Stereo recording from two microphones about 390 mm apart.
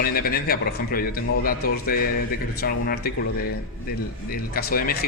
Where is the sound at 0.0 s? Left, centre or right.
Left.